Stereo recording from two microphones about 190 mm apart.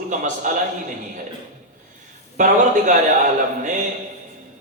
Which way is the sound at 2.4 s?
40° right (ahead or behind).